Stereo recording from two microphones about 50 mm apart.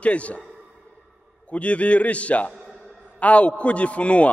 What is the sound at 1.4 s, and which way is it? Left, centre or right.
A man's voice, left.